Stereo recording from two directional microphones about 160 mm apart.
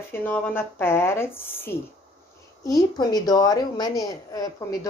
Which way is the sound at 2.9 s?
25° left (ahead or behind).